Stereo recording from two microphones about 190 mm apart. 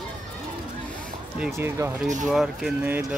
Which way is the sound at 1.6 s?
10° right (ahead or behind).